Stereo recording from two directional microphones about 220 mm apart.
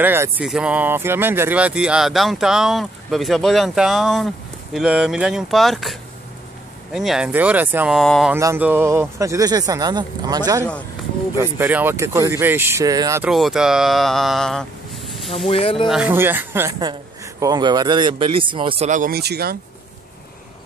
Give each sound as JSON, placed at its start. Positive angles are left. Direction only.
{"t": 0.0, "sound": "speech", "side_deg": -10}
{"t": 8.4, "sound": "speech", "side_deg": -10}
{"t": 13.3, "sound": "speech", "side_deg": 0}
{"t": 15.3, "sound": "speech", "side_deg": 25}
{"t": 15.9, "sound": "speech", "side_deg": -5}